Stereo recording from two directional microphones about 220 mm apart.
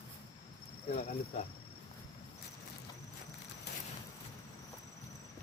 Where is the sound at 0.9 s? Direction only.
25° left (ahead or behind).